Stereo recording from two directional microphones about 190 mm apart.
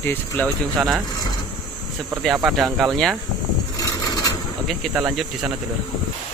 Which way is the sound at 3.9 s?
20° left (ahead or behind).